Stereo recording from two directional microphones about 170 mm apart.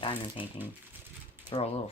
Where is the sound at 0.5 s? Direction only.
10° right (ahead or behind).